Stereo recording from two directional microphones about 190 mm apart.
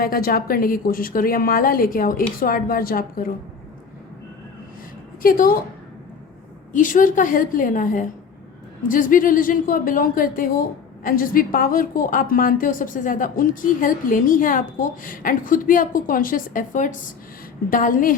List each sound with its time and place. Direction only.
0.0 s speech: 50° left (ahead or behind)
5.2 s speech: 50° left (ahead or behind)
6.7 s speech: 45° left (ahead or behind)